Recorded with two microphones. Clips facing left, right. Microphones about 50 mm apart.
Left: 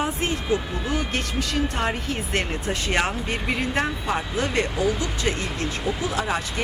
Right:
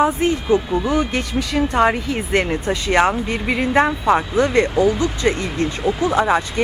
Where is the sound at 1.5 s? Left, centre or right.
Right.